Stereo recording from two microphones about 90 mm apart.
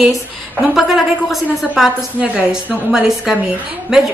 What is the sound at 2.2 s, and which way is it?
A woman's voice, 15° right (ahead or behind).